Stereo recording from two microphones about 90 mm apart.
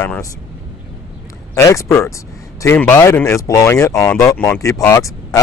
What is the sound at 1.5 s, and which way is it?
Speech, 35° left (ahead or behind).